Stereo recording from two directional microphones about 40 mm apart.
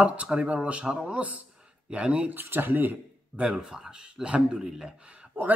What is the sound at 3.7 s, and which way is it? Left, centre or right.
Speech, centre.